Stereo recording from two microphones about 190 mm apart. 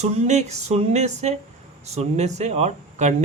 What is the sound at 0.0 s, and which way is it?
A man's voice, 35° right (ahead or behind).